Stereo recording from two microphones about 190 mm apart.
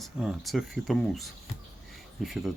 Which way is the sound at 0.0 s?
Centre (ahead or behind).